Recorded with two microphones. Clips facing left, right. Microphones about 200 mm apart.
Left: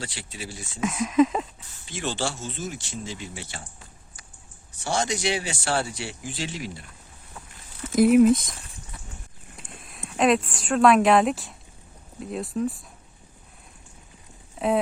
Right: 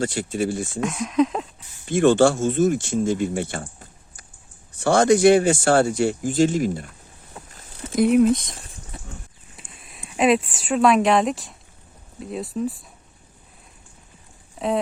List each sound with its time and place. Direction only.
0.0 s speech: 50° right (ahead or behind)
0.8 s speech: centre (ahead or behind)
1.8 s speech: 55° right (ahead or behind)
7.9 s speech: centre (ahead or behind)
9.8 s speech: centre (ahead or behind)
14.6 s a sound: centre (ahead or behind)